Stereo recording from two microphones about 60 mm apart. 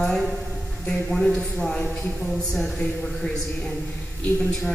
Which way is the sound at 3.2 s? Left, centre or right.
Left.